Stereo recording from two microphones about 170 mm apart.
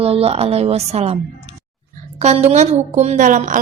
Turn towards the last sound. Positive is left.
turn(degrees=-50)  # may be behind; listen again after turning